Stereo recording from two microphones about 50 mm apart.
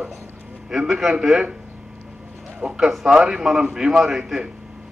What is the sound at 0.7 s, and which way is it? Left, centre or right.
Speech, centre.